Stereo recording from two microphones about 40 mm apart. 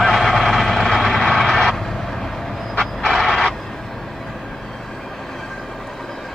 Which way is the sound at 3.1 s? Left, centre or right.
Centre.